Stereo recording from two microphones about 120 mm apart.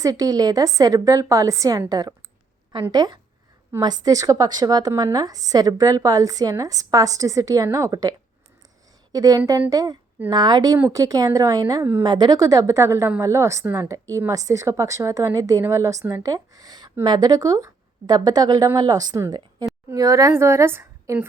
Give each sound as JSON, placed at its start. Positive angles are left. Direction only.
{"t": 0.0, "sound": "a woman's voice", "side_deg": -30}
{"t": 9.1, "sound": "a woman's voice", "side_deg": -30}
{"t": 12.0, "sound": "a woman's voice", "side_deg": -35}